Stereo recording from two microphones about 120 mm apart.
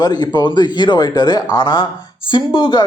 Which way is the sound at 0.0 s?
35° left (ahead or behind).